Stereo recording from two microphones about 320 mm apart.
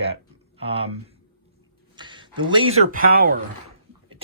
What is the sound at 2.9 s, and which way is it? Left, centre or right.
Speech, right.